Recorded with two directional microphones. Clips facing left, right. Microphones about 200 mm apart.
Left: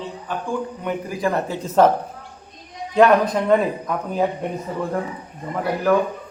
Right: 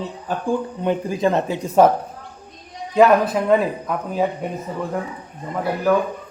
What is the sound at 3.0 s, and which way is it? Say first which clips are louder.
Speech: right 1 dB; 5° right (ahead or behind).